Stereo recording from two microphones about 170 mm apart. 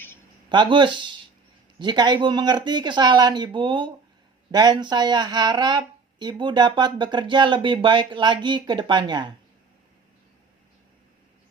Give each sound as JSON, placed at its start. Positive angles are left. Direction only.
{"t": 0.5, "sound": "a woman's voice", "side_deg": -30}